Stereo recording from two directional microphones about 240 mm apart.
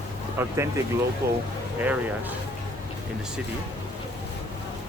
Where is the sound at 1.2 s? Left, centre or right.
Right.